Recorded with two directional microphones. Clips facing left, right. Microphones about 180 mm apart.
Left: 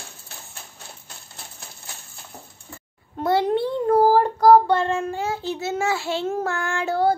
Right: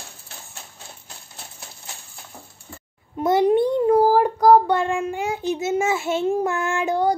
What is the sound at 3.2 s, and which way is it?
Child singing, 20° right (ahead or behind).